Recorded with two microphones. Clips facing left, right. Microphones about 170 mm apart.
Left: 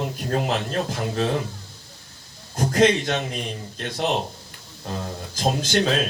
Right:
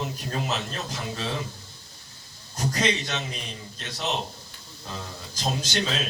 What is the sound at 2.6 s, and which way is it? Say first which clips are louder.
A man's voice: left 8 dB; 55° left (ahead or behind).